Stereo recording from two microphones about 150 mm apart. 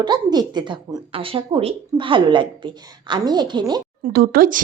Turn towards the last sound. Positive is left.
turn(degrees=-70)  # may be behind; listen again after turning